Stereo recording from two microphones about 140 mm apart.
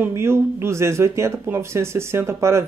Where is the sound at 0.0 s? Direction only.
20° right (ahead or behind).